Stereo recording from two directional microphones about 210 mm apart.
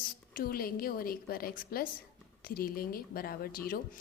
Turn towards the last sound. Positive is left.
turn(degrees=45)  # may be behind; listen again after turning